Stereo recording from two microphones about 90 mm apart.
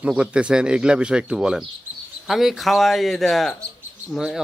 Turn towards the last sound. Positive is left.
turn(degrees=0)  # may be behind; listen again after turning